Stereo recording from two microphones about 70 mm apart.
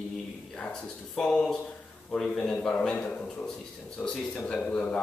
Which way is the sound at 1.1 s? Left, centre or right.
Centre.